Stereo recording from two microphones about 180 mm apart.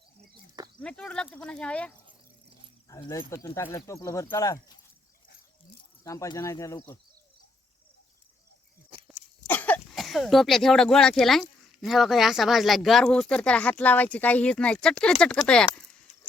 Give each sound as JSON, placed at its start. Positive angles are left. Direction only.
{"t": 0.8, "sound": "speech", "side_deg": 5}
{"t": 2.9, "sound": "speech", "side_deg": 20}
{"t": 6.1, "sound": "speech", "side_deg": 15}
{"t": 9.5, "sound": "speech", "side_deg": 10}